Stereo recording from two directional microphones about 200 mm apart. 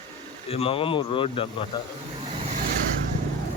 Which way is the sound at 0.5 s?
30° left (ahead or behind).